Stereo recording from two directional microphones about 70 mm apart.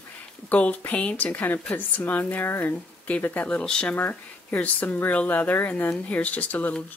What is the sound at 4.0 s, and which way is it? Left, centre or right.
Speech, left.